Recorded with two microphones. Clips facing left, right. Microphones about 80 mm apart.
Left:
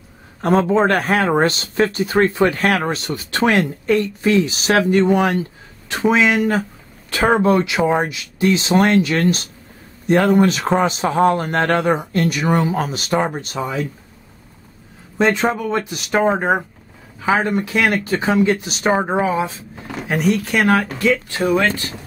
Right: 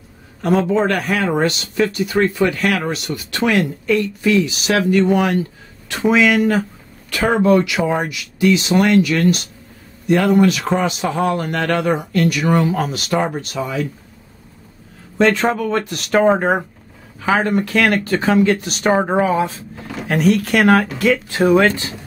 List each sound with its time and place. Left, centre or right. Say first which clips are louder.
0.4 s speech: left 1 dB; left
15.1 s speech: right 2 dB; centre
18.9 s speech: right 2 dB; centre